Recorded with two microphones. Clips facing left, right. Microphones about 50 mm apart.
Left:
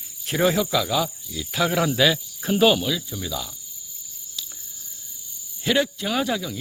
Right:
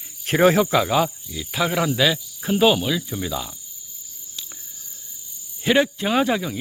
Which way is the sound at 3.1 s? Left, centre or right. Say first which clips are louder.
Right 3 dB; right.